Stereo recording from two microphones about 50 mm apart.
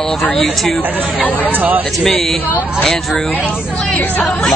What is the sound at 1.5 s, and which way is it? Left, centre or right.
Speech, right.